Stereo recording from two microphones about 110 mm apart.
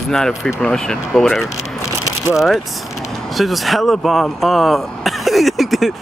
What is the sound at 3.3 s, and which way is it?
Speech, centre (ahead or behind).